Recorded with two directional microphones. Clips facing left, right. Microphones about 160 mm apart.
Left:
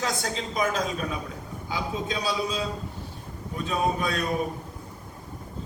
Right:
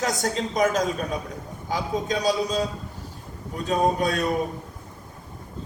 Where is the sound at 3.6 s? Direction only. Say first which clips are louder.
Right 4 dB; 40° right (ahead or behind).